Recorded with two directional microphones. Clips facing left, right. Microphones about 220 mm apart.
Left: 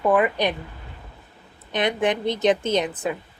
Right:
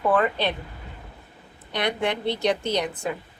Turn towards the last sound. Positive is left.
turn(degrees=20)  # may be behind; listen again after turning